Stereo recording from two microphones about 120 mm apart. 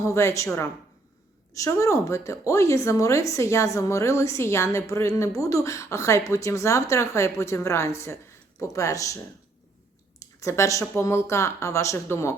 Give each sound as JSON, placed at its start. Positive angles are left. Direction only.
{"t": 0.1, "sound": "a woman's voice", "side_deg": 25}
{"t": 1.5, "sound": "a woman's voice", "side_deg": 25}
{"t": 10.2, "sound": "a woman's voice", "side_deg": 25}